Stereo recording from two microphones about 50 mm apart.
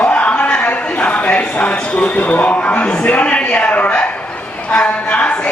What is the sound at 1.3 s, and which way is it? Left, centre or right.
Speech, left.